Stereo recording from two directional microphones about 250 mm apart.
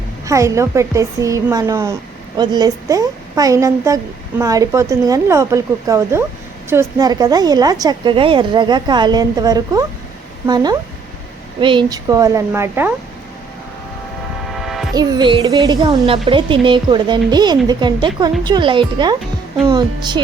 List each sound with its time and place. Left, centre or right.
0.3 s a woman's voice: centre
14.5 s music: centre
14.9 s a woman's voice: centre